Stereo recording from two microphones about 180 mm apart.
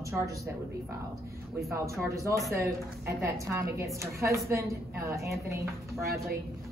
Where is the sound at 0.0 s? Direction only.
15° right (ahead or behind).